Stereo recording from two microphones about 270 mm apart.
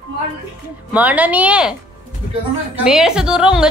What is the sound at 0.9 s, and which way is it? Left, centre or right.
Speech, centre.